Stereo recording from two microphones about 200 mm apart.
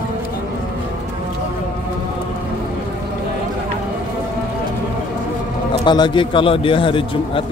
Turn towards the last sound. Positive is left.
turn(degrees=25)  # may be behind; listen again after turning